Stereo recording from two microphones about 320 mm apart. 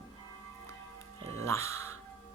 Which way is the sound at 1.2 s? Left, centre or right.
Right.